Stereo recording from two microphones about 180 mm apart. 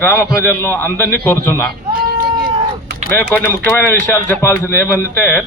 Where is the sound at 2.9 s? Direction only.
75° right (ahead or behind).